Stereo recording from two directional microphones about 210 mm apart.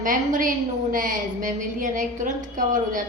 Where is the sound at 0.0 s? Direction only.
40° right (ahead or behind).